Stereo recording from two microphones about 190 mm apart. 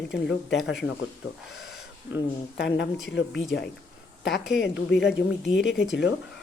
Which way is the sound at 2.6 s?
65° left (ahead or behind).